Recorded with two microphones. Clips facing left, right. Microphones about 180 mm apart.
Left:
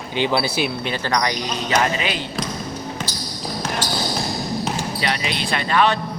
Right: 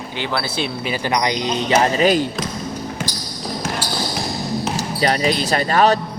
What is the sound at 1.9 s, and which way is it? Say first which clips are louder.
Speech: right 9 dB; 40° right (ahead or behind).